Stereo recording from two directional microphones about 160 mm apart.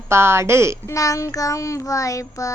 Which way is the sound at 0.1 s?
15° right (ahead or behind).